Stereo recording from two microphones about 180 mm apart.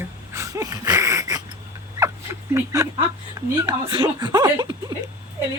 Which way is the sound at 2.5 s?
15° right (ahead or behind).